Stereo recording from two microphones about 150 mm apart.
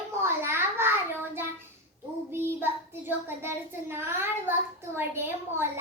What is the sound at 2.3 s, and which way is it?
Child singing, 15° right (ahead or behind).